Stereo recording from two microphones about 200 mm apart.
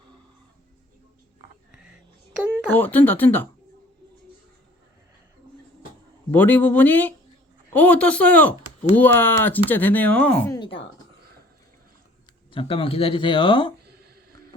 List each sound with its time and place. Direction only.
1.7 s a sound: 5° right (ahead or behind)
2.6 s speech: 10° left (ahead or behind)
6.3 s speech: 10° left (ahead or behind)
10.6 s speech: 25° left (ahead or behind)
12.5 s speech: 25° left (ahead or behind)